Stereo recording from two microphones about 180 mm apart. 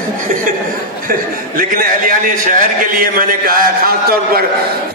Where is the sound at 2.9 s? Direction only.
50° right (ahead or behind).